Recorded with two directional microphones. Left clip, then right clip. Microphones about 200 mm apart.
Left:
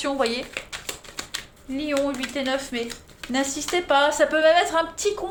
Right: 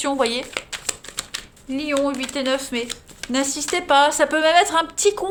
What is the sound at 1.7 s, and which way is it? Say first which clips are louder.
A woman's voice: right 3 dB; 50° right (ahead or behind).